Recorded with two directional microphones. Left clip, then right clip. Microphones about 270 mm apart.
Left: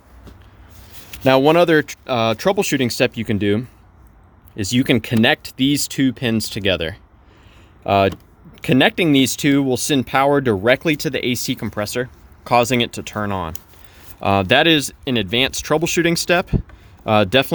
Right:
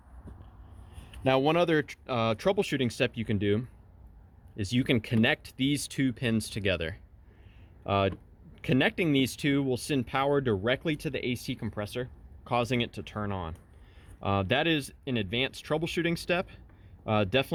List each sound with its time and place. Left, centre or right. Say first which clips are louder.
1.2 s speech: left 12 dB; left